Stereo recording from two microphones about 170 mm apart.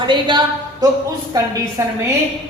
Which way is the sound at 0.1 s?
25° right (ahead or behind).